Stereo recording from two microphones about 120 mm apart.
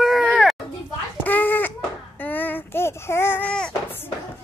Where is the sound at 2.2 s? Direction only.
15° left (ahead or behind).